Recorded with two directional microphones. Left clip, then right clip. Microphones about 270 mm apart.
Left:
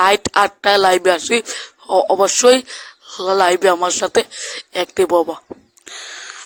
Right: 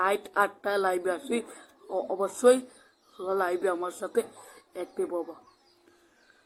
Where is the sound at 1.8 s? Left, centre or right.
Left.